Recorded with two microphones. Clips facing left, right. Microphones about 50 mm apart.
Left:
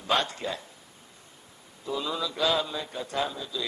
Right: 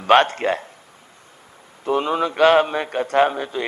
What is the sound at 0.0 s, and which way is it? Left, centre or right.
Speech, right.